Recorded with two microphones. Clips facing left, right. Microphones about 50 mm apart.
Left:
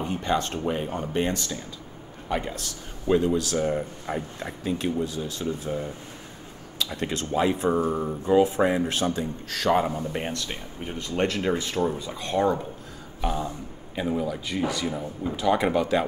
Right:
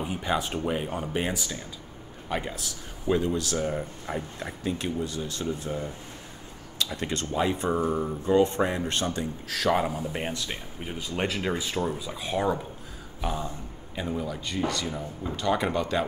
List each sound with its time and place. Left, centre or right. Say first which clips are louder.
0.0 s speech: left 2 dB; centre